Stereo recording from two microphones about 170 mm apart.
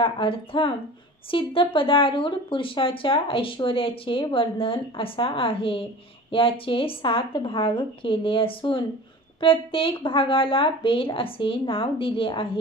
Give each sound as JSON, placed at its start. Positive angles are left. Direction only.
{"t": 0.0, "sound": "speech", "side_deg": 30}